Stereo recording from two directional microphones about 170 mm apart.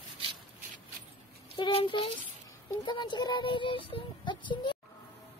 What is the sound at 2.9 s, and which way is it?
Child singing, 25° left (ahead or behind).